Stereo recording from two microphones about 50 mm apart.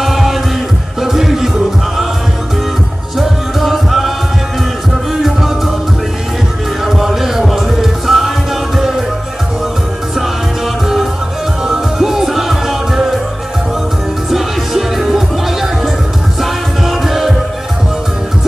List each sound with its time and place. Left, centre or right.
0.0 s music: centre
3.2 s music: centre
6.8 s music: centre
11.6 s music: centre
14.3 s music: centre